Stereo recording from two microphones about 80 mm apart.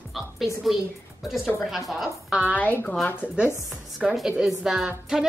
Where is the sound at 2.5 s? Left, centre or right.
Left.